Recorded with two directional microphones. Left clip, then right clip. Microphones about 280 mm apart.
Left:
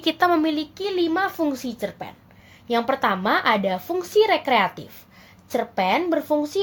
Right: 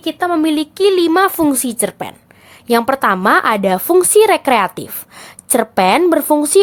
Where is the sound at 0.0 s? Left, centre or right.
Centre.